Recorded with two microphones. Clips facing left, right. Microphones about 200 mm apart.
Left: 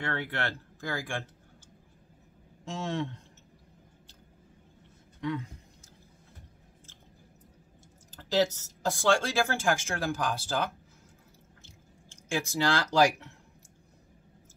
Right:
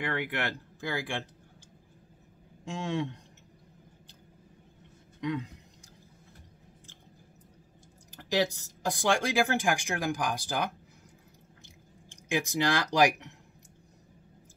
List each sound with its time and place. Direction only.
0.0 s speech: 15° right (ahead or behind)
2.8 s speech: 15° right (ahead or behind)
5.2 s speech: 20° right (ahead or behind)
8.2 s speech: 15° right (ahead or behind)
11.6 s chewing: 15° right (ahead or behind)